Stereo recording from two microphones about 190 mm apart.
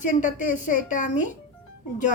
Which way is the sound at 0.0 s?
45° left (ahead or behind).